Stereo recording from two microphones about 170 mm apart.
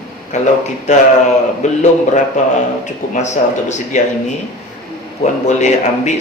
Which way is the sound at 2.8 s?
45° left (ahead or behind).